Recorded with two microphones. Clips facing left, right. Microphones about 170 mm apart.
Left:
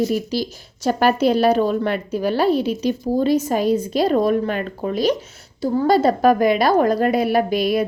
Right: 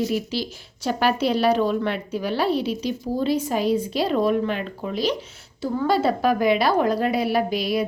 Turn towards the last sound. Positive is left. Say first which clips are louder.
# left 4 dB
turn(degrees=50)  # may be behind; listen again after turning